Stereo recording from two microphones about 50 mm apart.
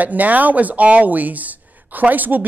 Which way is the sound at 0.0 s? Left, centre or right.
Right.